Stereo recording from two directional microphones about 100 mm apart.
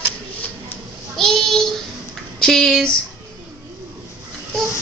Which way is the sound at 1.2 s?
5° left (ahead or behind).